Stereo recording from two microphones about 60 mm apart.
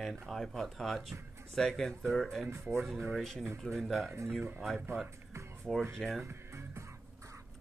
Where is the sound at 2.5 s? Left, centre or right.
Right.